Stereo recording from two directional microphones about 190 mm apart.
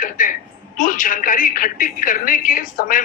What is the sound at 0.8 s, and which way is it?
A woman's voice, 45° left (ahead or behind).